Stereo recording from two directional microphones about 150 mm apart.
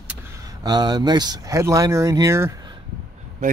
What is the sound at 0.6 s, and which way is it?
Speech, 25° right (ahead or behind).